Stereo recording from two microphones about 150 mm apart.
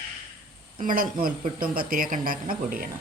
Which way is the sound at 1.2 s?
70° right (ahead or behind).